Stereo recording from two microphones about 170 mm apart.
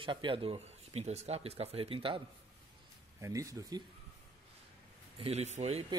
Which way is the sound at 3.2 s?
20° right (ahead or behind).